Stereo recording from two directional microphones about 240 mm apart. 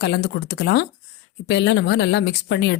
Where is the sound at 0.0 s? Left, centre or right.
Left.